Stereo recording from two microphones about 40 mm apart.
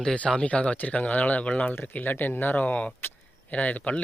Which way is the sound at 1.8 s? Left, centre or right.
Left.